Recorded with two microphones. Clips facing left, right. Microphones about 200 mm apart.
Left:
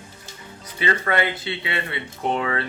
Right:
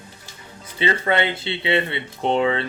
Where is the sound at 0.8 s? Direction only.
25° right (ahead or behind).